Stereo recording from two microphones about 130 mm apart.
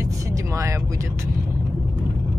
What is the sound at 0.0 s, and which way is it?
Vehicle, 25° right (ahead or behind).